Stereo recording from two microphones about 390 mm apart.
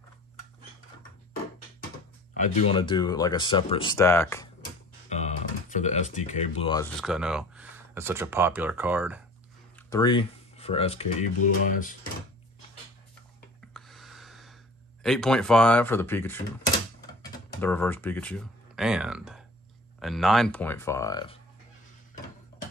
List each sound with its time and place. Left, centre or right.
2.3 s speech: centre
5.1 s speech: centre
9.8 s speech: centre
13.7 s a sound: centre
15.0 s speech: centre